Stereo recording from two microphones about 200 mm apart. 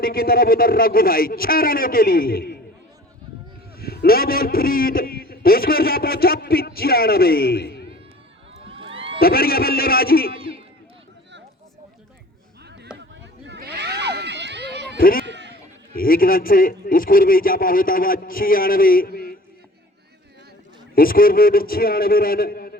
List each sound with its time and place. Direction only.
0.0 s a man's voice: 50° left (ahead or behind)
3.8 s a man's voice: 50° left (ahead or behind)
8.6 s cat: 25° right (ahead or behind)
9.2 s a man's voice: 50° left (ahead or behind)
12.9 s a sound: 5° right (ahead or behind)
13.5 s a sound: 55° right (ahead or behind)
14.9 s speech: 45° left (ahead or behind)
15.3 s bleat: 60° right (ahead or behind)
15.9 s a man's voice: 45° left (ahead or behind)
20.9 s a man's voice: 45° left (ahead or behind)